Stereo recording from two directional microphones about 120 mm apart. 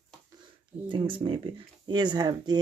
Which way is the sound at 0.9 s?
45° right (ahead or behind).